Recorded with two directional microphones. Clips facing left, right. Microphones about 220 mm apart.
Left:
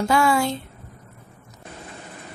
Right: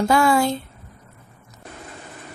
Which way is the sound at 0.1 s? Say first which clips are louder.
Right 2 dB; 40° right (ahead or behind).